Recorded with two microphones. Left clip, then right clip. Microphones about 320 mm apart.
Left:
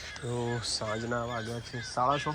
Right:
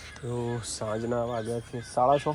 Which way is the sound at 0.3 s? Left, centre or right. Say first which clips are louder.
Even; centre.